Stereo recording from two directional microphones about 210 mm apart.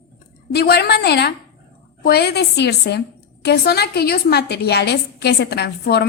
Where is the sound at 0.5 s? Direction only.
50° left (ahead or behind).